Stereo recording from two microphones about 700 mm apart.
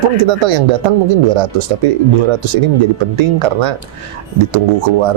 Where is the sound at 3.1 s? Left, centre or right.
Right.